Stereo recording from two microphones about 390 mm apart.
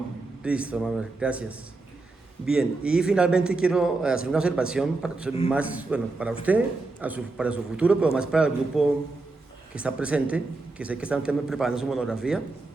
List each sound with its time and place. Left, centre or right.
0.4 s a man's voice: centre